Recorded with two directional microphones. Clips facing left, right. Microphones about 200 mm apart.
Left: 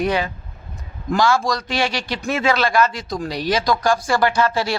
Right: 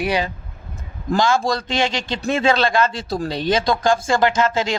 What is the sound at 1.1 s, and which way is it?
A man's voice, 25° right (ahead or behind).